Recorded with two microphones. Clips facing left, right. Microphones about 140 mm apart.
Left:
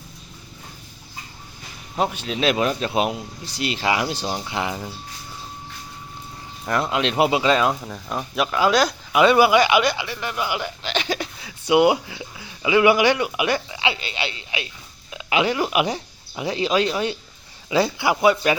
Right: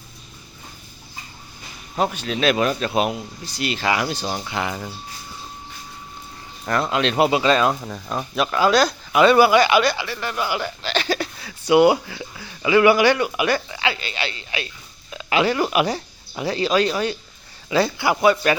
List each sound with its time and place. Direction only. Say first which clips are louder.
2.0 s speech: right 1 dB; 20° left (ahead or behind)
6.9 s speech: right 1 dB; 15° left (ahead or behind)
7.7 s speech: right 1 dB; centre (ahead or behind)
8.5 s speech: right 1 dB; 20° left (ahead or behind)